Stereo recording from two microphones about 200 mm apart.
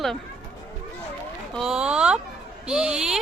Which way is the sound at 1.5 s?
5° right (ahead or behind).